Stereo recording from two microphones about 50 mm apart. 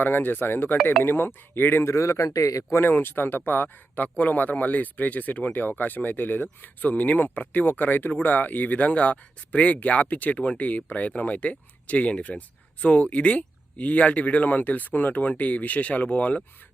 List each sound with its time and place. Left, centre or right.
0.0 s speech: left
1.8 s a man's voice: left
2.7 s speech: left